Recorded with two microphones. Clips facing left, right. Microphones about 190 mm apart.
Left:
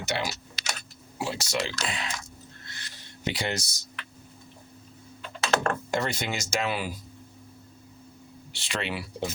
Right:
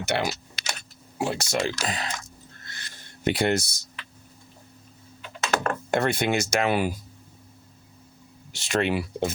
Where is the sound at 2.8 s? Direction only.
50° right (ahead or behind).